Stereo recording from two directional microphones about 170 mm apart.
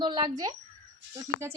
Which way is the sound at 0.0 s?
25° right (ahead or behind).